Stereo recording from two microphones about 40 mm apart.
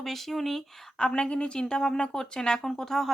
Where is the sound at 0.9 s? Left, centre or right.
Left.